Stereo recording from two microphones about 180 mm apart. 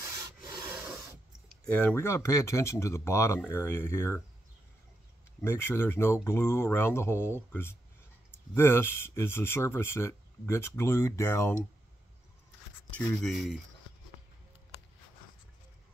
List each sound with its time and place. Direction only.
0.0 s rub: 20° right (ahead or behind)
1.5 s speech: 5° left (ahead or behind)
5.4 s speech: 15° left (ahead or behind)
12.9 s speech: centre (ahead or behind)